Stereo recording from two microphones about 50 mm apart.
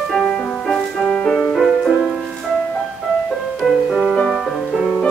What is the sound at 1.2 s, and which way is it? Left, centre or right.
Music, centre.